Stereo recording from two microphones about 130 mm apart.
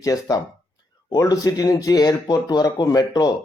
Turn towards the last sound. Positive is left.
turn(degrees=30)  # may be behind; listen again after turning